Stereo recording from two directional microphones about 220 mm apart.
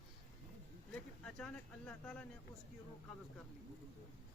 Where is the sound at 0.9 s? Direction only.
5° left (ahead or behind).